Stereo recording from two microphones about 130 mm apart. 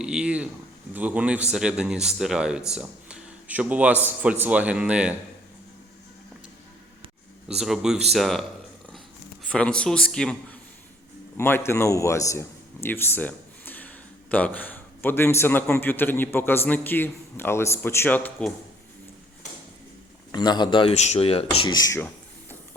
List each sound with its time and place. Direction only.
0.0 s speech: 5° right (ahead or behind)
7.4 s speech: 5° right (ahead or behind)
9.5 s a man's voice: 10° left (ahead or behind)
11.3 s a man's voice: 20° left (ahead or behind)
20.3 s speech: 35° left (ahead or behind)
20.9 s speech: 55° left (ahead or behind)
21.7 s speech: 30° left (ahead or behind)
21.9 s a sound: 15° left (ahead or behind)